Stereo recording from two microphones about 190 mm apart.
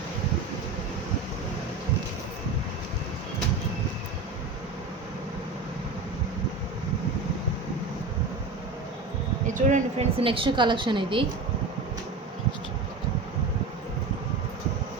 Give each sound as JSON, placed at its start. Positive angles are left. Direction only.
{"t": 9.6, "sound": "a woman's voice", "side_deg": -40}